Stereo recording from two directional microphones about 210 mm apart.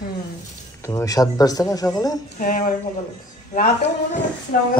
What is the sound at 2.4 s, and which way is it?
Speech, 40° left (ahead or behind).